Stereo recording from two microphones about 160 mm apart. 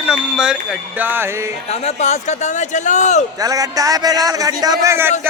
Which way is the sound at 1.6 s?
40° left (ahead or behind).